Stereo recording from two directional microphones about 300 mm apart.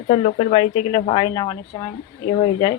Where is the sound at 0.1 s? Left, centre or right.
Left.